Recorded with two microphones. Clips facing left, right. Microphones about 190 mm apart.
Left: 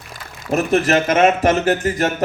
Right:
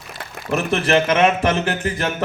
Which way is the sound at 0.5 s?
45° left (ahead or behind).